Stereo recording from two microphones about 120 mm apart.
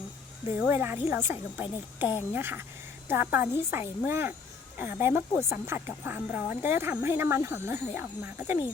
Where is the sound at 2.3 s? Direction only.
15° right (ahead or behind).